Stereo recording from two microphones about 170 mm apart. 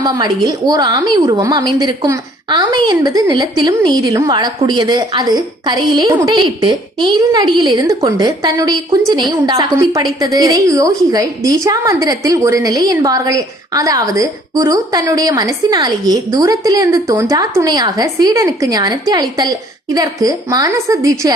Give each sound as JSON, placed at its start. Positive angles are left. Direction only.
{"t": 0.0, "sound": "a woman's voice", "side_deg": -25}